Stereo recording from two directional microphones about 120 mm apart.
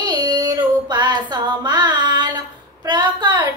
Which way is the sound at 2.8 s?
35° right (ahead or behind).